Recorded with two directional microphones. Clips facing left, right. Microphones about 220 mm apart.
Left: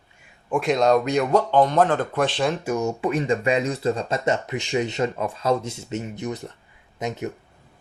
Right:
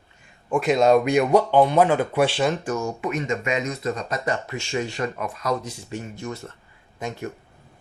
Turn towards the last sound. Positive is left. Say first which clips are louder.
# left 3 dB
turn(degrees=20)  # may be behind; listen again after turning